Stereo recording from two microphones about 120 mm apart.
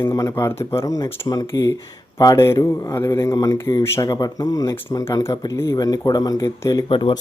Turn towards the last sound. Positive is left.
turn(degrees=45)  # may be behind; listen again after turning